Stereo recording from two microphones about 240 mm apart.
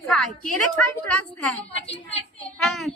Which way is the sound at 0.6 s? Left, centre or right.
Left.